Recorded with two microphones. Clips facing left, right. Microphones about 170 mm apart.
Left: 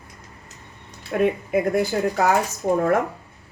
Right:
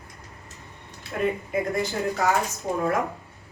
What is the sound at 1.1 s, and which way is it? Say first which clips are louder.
Speech: left 5 dB; 60° left (ahead or behind).